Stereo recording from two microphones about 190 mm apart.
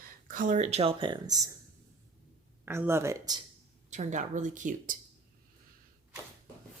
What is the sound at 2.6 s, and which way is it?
Speech, 10° right (ahead or behind).